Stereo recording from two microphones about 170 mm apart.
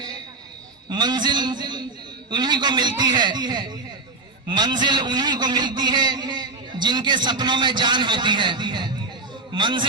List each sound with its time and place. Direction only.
0.9 s a man's voice: 25° right (ahead or behind)